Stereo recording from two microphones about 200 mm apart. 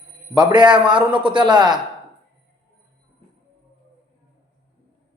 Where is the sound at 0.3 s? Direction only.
25° right (ahead or behind).